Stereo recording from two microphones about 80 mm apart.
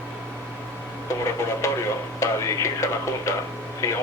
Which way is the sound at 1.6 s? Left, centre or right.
Left.